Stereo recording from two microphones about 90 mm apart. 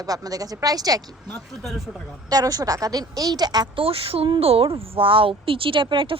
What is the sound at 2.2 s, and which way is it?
A woman's voice, 45° right (ahead or behind).